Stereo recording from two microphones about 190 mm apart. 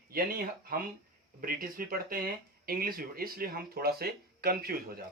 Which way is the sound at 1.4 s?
50° right (ahead or behind).